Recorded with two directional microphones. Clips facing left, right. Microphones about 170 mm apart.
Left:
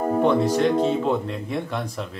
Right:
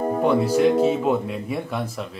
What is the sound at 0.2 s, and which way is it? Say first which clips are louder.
Speech: right 2 dB; 10° right (ahead or behind).